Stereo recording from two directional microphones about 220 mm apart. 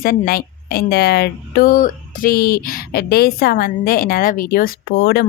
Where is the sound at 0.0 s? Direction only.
40° left (ahead or behind).